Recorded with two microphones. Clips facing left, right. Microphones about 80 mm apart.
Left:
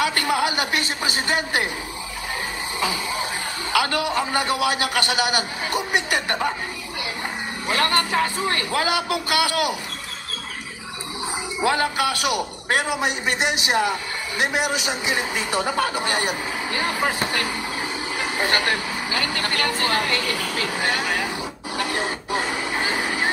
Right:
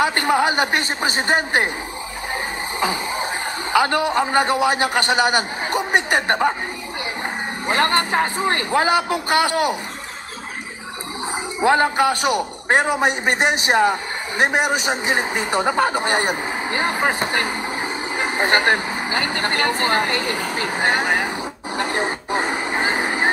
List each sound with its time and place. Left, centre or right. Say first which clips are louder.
0.0 s a man's voice: right 4 dB; right
2.8 s throat clearing: right 3 dB; right
3.7 s a man's voice: right 4 dB; right
7.6 s a man's voice: right 3 dB; right
11.6 s a man's voice: right 5 dB; right
21.7 s a sound: right 3 dB; right